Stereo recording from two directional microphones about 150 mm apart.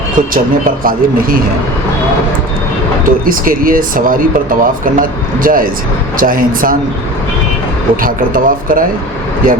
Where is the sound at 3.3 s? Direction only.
70° right (ahead or behind).